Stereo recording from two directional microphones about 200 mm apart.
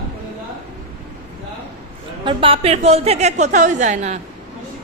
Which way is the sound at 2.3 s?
25° right (ahead or behind).